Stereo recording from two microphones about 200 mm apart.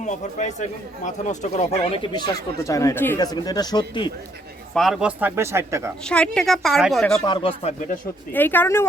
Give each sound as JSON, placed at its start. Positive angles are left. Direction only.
{"t": 0.0, "sound": "speech", "side_deg": 35}
{"t": 4.7, "sound": "speech", "side_deg": 0}
{"t": 6.1, "sound": "speech", "side_deg": 5}
{"t": 7.3, "sound": "speech", "side_deg": 25}
{"t": 8.3, "sound": "speech", "side_deg": 10}